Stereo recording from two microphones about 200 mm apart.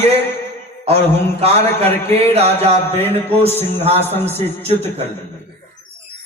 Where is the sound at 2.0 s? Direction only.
30° right (ahead or behind).